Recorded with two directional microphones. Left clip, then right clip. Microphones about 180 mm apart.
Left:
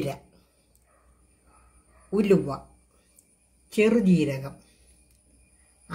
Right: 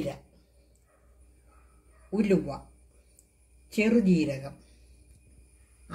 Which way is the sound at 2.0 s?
55° left (ahead or behind).